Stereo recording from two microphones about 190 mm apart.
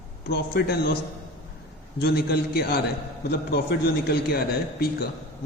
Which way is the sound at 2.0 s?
55° left (ahead or behind).